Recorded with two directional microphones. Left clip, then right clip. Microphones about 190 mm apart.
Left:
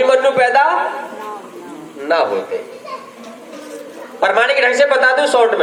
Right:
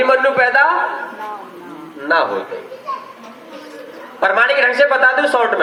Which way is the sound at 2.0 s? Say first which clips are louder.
Even; 30° left (ahead or behind).